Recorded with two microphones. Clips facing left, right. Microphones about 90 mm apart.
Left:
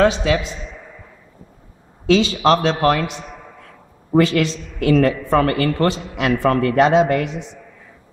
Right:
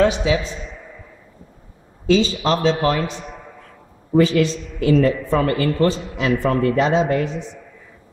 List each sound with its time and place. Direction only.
0.0 s a man's voice: 80° left
2.0 s a man's voice: 70° left (ahead or behind)
4.2 s a man's voice: 75° left (ahead or behind)